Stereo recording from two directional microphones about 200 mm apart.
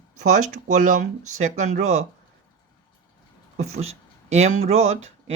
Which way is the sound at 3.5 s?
35° right (ahead or behind).